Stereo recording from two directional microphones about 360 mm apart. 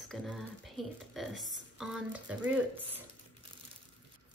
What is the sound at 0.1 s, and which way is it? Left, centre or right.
Speech, centre.